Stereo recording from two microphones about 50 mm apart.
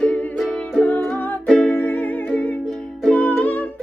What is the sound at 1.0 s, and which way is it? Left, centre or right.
Music, centre.